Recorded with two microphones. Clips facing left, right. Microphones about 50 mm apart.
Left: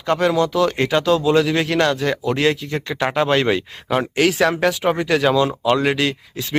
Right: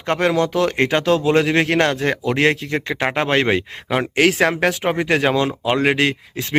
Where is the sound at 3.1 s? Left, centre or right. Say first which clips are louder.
Left 1 dB; right.